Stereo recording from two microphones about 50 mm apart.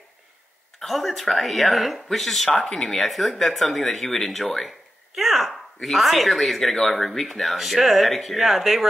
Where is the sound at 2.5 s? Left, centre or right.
Centre.